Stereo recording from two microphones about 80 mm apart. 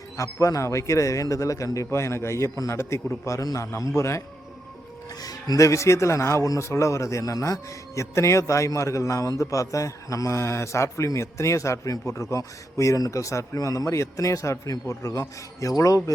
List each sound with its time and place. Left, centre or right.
0.2 s a man's voice: left
5.2 s a man's voice: left